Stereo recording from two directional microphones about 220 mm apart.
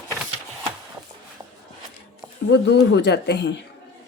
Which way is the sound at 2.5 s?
50° left (ahead or behind).